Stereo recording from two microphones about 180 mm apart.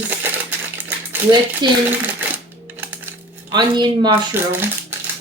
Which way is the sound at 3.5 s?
25° right (ahead or behind).